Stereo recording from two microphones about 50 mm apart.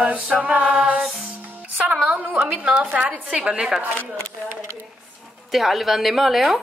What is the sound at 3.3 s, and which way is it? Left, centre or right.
Speech, centre.